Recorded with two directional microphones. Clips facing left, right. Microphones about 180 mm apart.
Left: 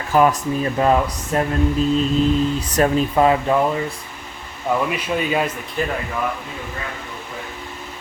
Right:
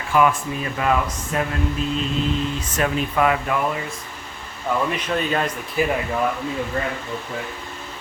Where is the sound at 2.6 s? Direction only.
35° left (ahead or behind).